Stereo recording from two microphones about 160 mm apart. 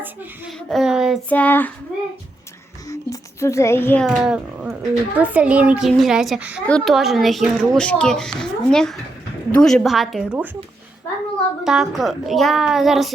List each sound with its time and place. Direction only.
0.7 s a child's voice: centre (ahead or behind)
1.3 s a child's voice: 10° left (ahead or behind)
2.8 s a child's voice: 20° left (ahead or behind)
4.0 s a child's voice: 5° right (ahead or behind)
11.6 s a child's voice: 5° right (ahead or behind)